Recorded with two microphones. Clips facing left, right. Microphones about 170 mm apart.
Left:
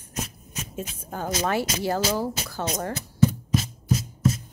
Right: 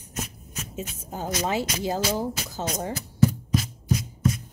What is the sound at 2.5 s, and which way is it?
Speech, 20° right (ahead or behind).